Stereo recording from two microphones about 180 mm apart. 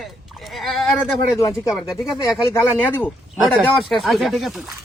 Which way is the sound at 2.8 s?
10° left (ahead or behind).